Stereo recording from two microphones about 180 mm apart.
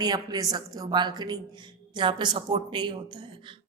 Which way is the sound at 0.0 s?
20° right (ahead or behind).